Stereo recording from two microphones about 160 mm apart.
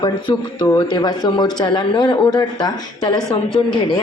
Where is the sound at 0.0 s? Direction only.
30° left (ahead or behind).